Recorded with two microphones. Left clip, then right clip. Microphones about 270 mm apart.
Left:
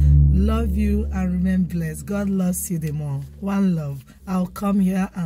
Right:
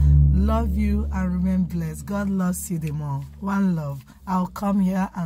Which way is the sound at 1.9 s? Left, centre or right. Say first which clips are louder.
Left 2 dB; right.